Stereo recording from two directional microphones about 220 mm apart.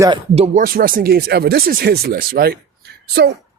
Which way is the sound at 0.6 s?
40° right (ahead or behind).